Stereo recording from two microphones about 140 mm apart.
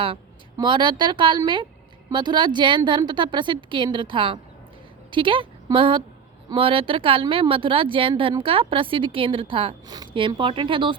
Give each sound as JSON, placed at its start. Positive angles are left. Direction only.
{"t": 0.6, "sound": "speech", "side_deg": -35}